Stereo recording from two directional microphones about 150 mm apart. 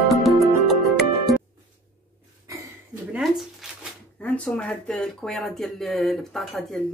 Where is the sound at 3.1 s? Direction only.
5° right (ahead or behind).